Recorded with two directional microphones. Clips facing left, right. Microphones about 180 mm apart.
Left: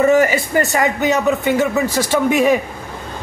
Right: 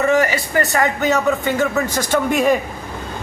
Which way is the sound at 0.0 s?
20° left (ahead or behind).